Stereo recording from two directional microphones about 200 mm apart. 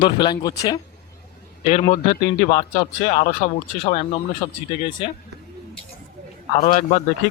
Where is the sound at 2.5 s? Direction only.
30° left (ahead or behind).